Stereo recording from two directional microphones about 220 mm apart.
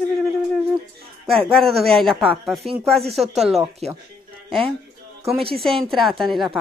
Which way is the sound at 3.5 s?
30° right (ahead or behind).